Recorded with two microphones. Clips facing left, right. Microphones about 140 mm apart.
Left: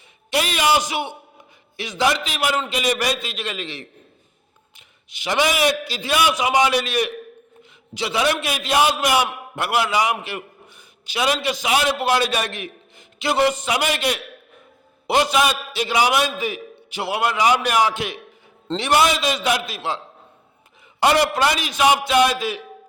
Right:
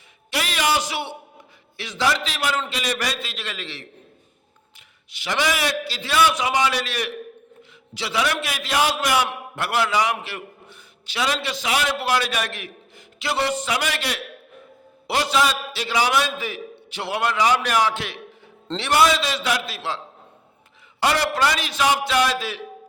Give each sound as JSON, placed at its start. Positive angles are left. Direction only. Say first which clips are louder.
{"t": 0.3, "sound": "a man's voice", "louder": "left 4 dB", "side_deg": 20}
{"t": 5.1, "sound": "a man's voice", "louder": "left 3 dB", "side_deg": 20}
{"t": 21.0, "sound": "a man's voice", "louder": "left 3 dB", "side_deg": 20}